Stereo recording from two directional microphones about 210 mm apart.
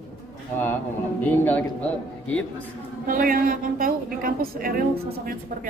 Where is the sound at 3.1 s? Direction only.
40° right (ahead or behind).